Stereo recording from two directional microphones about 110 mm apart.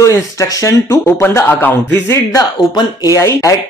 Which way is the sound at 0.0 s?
30° left (ahead or behind).